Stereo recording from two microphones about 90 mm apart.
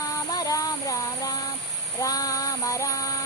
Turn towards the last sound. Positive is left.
turn(degrees=40)  # may be behind; listen again after turning